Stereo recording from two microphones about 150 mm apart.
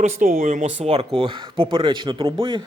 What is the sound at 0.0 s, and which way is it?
Speech, 65° right (ahead or behind).